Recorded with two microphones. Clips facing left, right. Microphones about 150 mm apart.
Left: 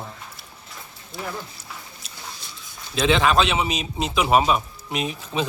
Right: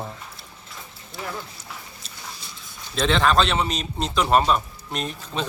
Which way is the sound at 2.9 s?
5° left (ahead or behind).